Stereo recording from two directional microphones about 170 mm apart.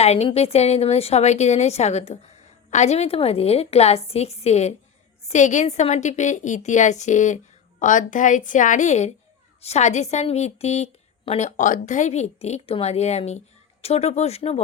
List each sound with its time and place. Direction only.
0.0 s a woman's voice: 40° left (ahead or behind)